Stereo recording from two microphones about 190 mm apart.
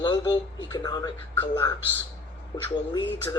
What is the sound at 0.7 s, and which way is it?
Speech, 20° left (ahead or behind).